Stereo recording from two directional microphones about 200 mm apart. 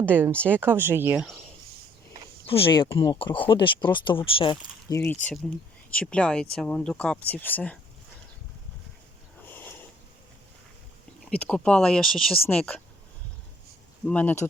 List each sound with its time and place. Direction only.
0.0 s speech: 10° right (ahead or behind)
2.5 s speech: 25° left (ahead or behind)
4.9 s speech: 10° left (ahead or behind)
9.5 s a sound: 10° left (ahead or behind)
11.3 s speech: 5° left (ahead or behind)
14.0 s speech: 5° left (ahead or behind)